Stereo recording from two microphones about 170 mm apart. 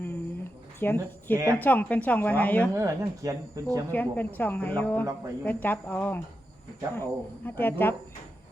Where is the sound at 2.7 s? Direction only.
20° right (ahead or behind).